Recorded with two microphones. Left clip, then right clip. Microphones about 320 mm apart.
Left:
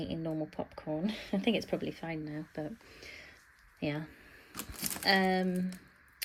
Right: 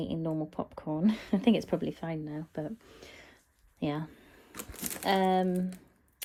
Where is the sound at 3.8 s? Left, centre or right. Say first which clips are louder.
Right 2 dB; right.